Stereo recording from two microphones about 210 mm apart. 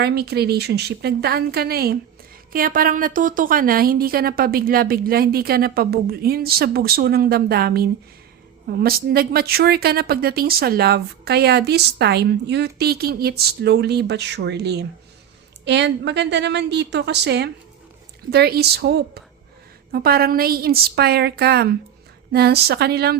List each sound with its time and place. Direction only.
0.0 s a woman's voice: 50° right (ahead or behind)